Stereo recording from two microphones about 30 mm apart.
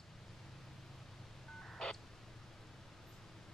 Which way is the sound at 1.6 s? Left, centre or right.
Centre.